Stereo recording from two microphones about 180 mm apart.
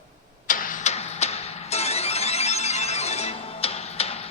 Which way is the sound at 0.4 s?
50° left (ahead or behind).